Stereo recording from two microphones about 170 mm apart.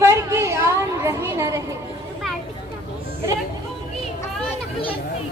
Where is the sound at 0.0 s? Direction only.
15° right (ahead or behind).